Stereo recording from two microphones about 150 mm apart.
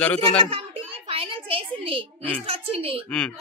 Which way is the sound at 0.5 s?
40° right (ahead or behind).